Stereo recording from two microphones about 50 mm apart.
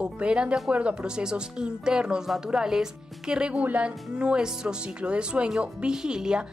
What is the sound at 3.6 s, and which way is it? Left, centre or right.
Speech, right.